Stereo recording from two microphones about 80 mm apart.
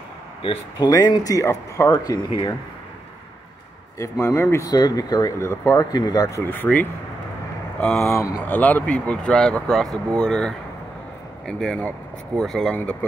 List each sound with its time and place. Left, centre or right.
0.7 s speech: left
4.0 s speech: left
4.6 s speech: left
5.4 s speech: left
6.4 s speech: left
7.8 s speech: centre
8.1 s speech: left
8.5 s speech: left; by 12.7 s centre